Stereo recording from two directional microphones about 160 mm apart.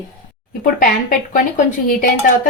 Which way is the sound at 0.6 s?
55° left (ahead or behind).